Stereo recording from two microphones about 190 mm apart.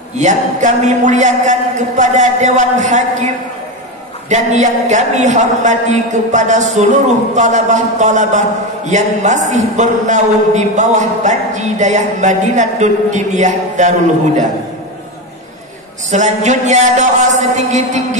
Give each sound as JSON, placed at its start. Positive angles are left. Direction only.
{"t": 0.2, "sound": "a man's voice", "side_deg": -40}
{"t": 4.3, "sound": "a man's voice", "side_deg": -40}
{"t": 16.1, "sound": "a man's voice", "side_deg": -40}